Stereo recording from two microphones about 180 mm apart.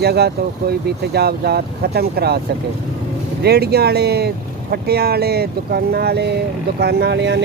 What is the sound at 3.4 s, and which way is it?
Speech, 65° right (ahead or behind).